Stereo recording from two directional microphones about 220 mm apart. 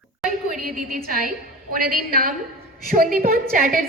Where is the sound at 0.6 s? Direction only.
40° right (ahead or behind).